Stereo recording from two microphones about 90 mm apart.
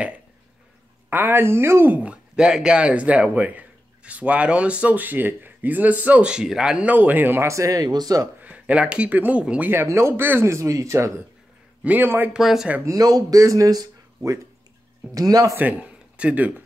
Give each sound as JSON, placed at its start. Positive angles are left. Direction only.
{"t": 1.1, "sound": "speech", "side_deg": -25}
{"t": 2.0, "sound": "speech", "side_deg": -10}
{"t": 8.4, "sound": "speech", "side_deg": -15}
{"t": 9.7, "sound": "a man's voice", "side_deg": -25}
{"t": 11.8, "sound": "speech", "side_deg": -20}
{"t": 12.3, "sound": "speech", "side_deg": -5}
{"t": 12.8, "sound": "a man's voice", "side_deg": -45}
{"t": 15.5, "sound": "speech", "side_deg": -20}